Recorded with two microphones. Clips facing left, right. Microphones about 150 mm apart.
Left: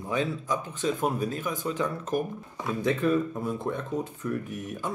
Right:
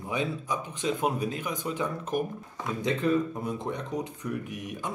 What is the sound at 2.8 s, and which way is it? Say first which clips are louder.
Speech: left 1 dB; 20° right (ahead or behind).